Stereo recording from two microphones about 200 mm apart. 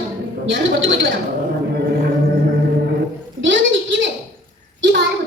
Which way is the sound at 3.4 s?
70° right (ahead or behind).